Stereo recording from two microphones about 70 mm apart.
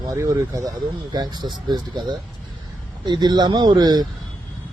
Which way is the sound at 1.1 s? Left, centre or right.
Right.